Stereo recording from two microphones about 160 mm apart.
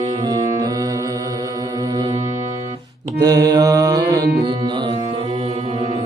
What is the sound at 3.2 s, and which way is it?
Mantra, 20° right (ahead or behind).